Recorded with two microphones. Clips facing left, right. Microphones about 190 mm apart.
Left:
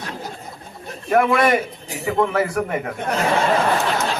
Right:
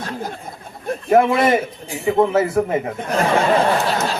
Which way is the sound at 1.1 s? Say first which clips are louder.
Right 2 dB; 25° right (ahead or behind).